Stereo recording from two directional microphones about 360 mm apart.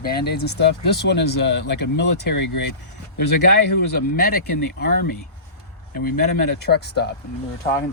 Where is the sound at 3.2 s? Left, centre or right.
Left.